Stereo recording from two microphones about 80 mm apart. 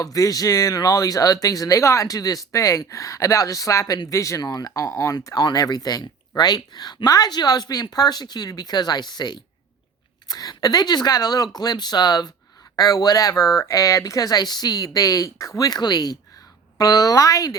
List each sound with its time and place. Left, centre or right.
0.0 s speech: left
5.2 s speech: left